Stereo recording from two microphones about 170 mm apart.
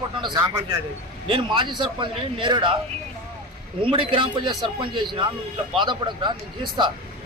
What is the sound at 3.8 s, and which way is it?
A man's voice, 30° right (ahead or behind).